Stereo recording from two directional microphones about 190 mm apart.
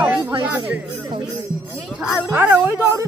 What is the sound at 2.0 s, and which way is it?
Speech, 10° right (ahead or behind).